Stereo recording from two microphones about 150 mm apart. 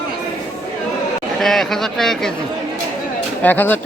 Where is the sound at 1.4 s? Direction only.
Centre (ahead or behind).